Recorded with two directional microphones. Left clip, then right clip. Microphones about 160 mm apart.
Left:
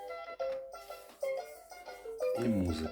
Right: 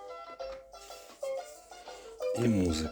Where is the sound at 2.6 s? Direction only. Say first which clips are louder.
Right 5 dB; 50° right (ahead or behind).